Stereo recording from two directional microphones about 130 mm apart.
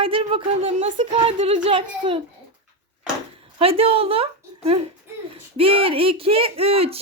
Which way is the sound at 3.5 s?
45° right (ahead or behind).